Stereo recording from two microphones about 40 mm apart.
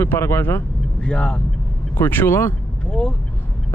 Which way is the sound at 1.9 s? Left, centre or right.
Left.